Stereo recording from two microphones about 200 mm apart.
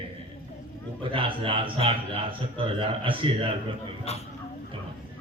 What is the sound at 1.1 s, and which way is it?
A man's voice, 25° right (ahead or behind).